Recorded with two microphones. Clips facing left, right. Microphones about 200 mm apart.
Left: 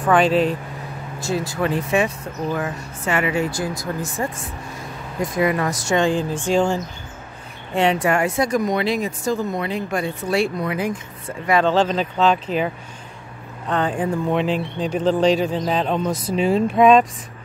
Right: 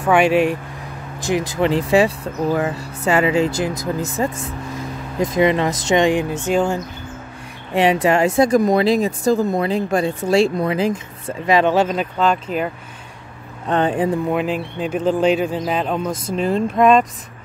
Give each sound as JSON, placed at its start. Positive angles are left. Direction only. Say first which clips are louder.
{"t": 0.0, "sound": "speech", "louder": "right 2 dB", "side_deg": -10}
{"t": 1.6, "sound": "speech", "louder": "right 5 dB", "side_deg": -30}
{"t": 7.7, "sound": "speech", "louder": "right 3 dB", "side_deg": -15}
{"t": 13.7, "sound": "speech", "louder": "right 4 dB", "side_deg": -20}
{"t": 14.3, "sound": "speech", "louder": "even", "side_deg": -5}